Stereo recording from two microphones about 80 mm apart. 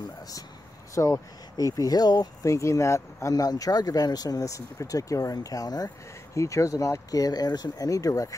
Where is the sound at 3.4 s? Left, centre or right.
Left.